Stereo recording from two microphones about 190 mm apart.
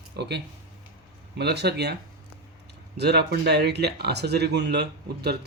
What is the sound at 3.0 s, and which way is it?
Speech, 60° right (ahead or behind).